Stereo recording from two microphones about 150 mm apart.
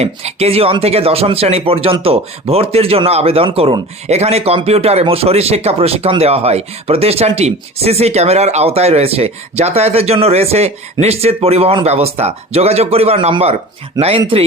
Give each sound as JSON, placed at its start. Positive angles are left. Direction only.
{"t": 0.0, "sound": "speech", "side_deg": -45}